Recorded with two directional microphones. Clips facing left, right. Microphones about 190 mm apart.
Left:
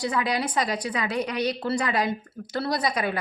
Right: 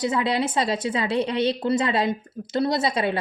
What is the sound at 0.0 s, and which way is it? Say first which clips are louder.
A woman's voice: right 3 dB; 25° right (ahead or behind).